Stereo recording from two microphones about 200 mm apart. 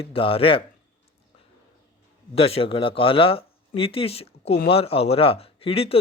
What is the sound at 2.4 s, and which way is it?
Speech, 30° left (ahead or behind).